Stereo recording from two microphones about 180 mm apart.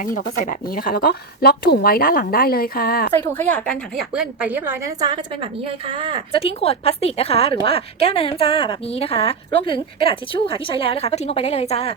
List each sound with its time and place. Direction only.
0.4 s speech: 50° left (ahead or behind)
3.1 s a woman's voice: 10° left (ahead or behind)
4.1 s a woman's voice: 5° right (ahead or behind); by 6.2 s 30° right (ahead or behind)
6.3 s a woman's voice: 30° left (ahead or behind)